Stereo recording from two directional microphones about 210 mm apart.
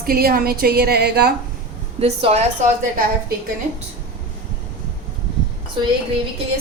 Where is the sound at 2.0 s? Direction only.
30° right (ahead or behind).